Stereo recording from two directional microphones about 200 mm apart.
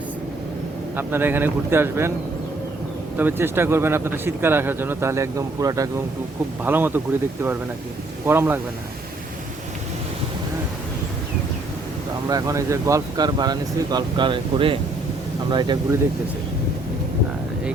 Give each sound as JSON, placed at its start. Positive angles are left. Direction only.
{"t": 0.9, "sound": "speech", "side_deg": -10}
{"t": 3.2, "sound": "speech", "side_deg": -10}
{"t": 8.3, "sound": "speech", "side_deg": -10}
{"t": 12.3, "sound": "speech", "side_deg": -15}